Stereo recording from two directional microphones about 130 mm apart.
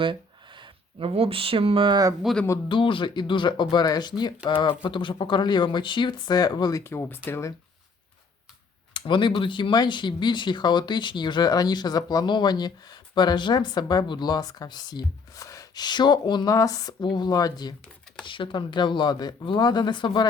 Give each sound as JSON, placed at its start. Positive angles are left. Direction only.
{"t": 0.0, "sound": "speech", "side_deg": -40}
{"t": 2.2, "sound": "speech", "side_deg": 5}
{"t": 2.6, "sound": "speech", "side_deg": 40}
{"t": 8.9, "sound": "speech", "side_deg": 35}